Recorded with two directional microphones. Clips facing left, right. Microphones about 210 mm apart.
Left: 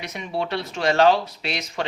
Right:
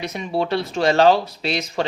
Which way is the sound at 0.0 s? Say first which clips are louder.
Right 4 dB; 35° right (ahead or behind).